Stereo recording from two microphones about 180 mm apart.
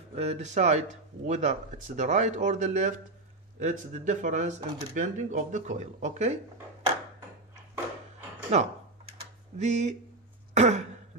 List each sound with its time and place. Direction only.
0.1 s speech: 35° right (ahead or behind)
8.5 s speech: 40° right (ahead or behind)
10.5 s throat clearing: 40° right (ahead or behind)